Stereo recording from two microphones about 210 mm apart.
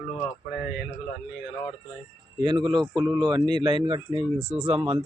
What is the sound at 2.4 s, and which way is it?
Speech, 20° right (ahead or behind).